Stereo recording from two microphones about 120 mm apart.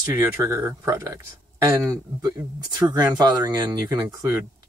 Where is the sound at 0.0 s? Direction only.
20° right (ahead or behind).